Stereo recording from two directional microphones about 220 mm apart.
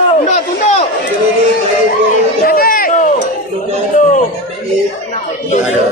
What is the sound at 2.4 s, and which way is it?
Speech, 40° left (ahead or behind).